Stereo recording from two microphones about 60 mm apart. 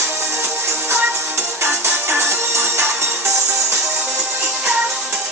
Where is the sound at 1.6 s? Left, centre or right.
Right.